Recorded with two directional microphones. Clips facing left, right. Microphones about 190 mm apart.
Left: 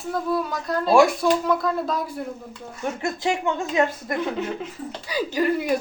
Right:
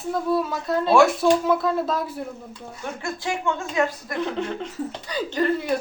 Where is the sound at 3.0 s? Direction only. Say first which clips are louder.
Left 3 dB; 20° left (ahead or behind).